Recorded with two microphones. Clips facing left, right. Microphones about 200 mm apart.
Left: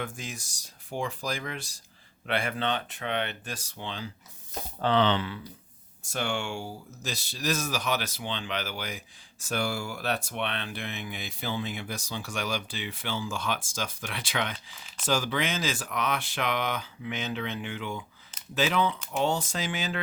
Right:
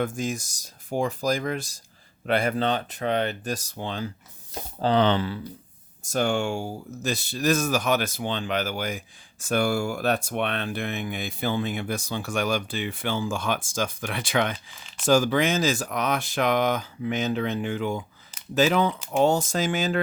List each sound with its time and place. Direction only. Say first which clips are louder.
0.0 s speech: right 10 dB; 45° right (ahead or behind)